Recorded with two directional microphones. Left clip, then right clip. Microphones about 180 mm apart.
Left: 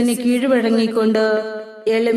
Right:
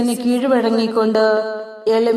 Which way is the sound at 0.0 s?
25° left (ahead or behind).